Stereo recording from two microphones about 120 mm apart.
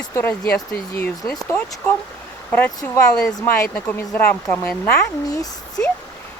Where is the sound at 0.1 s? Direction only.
20° left (ahead or behind).